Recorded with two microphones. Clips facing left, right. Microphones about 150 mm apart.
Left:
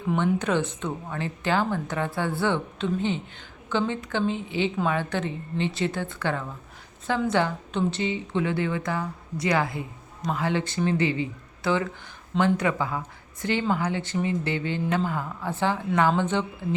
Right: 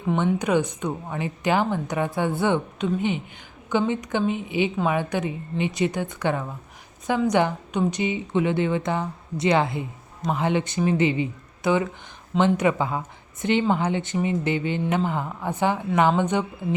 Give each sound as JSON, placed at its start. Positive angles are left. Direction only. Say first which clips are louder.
{"t": 0.3, "sound": "a woman's voice", "louder": "right 3 dB", "side_deg": -15}